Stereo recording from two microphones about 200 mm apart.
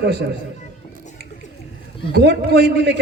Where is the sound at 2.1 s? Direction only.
55° right (ahead or behind).